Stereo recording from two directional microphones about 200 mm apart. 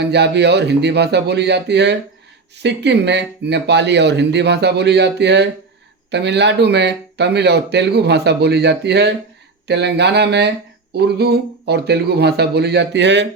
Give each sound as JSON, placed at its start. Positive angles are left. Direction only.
{"t": 0.0, "sound": "speech", "side_deg": -60}